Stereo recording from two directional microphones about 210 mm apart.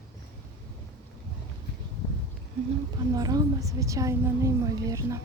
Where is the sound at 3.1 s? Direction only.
15° right (ahead or behind).